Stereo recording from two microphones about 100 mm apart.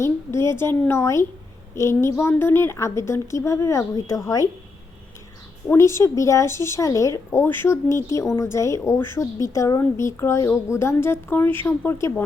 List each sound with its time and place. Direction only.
0.0 s a woman's voice: 25° left (ahead or behind)
5.7 s a woman's voice: 30° left (ahead or behind)